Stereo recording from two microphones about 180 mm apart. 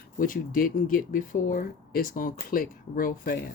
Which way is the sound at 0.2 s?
50° left (ahead or behind).